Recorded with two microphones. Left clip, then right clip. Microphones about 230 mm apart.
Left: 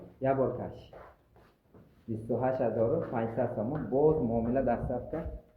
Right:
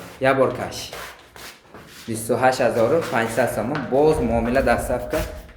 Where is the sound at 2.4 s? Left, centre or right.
Centre.